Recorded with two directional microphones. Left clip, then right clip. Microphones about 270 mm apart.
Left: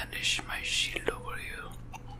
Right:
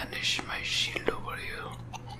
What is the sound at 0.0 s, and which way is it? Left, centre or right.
Whispering, centre.